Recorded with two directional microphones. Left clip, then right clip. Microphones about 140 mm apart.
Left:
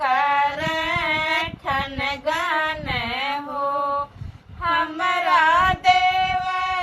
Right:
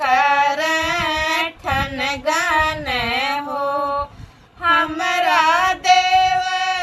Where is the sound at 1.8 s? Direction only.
35° right (ahead or behind).